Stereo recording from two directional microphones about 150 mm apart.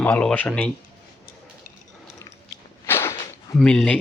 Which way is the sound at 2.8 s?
15° left (ahead or behind).